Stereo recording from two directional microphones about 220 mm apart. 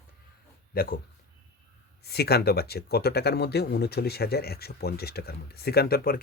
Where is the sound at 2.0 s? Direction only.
45° left (ahead or behind).